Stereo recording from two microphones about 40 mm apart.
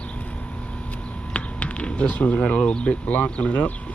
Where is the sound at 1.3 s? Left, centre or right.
Left.